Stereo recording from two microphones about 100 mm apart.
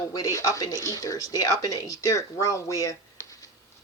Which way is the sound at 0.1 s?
35° left (ahead or behind).